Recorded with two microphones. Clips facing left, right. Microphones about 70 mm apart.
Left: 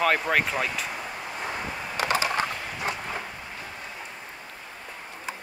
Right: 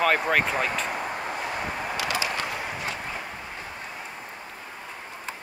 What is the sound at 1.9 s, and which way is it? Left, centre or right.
Typing, left.